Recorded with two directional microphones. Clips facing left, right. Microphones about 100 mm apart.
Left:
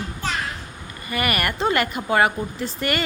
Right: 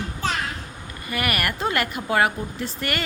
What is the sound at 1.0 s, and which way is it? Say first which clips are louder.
Speech: left 2 dB; centre (ahead or behind).